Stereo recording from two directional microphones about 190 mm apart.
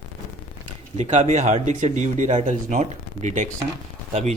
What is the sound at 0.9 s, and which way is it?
Speech, 35° right (ahead or behind).